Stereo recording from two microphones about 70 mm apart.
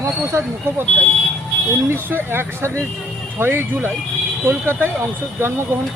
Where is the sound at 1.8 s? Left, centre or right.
Right.